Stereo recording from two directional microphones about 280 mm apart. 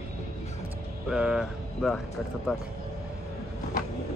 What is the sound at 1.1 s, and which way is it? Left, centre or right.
Speech, centre.